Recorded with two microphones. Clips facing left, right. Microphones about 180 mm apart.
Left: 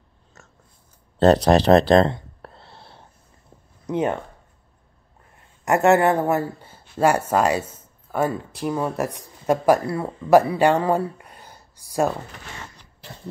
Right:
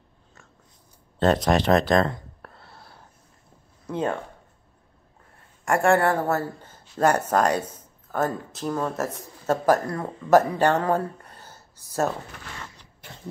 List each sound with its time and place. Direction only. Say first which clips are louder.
1.2 s a sound: left 5 dB; 35° left (ahead or behind)
3.8 s speech: left 4 dB; 20° left (ahead or behind)
5.7 s speech: left 3 dB; 20° left (ahead or behind)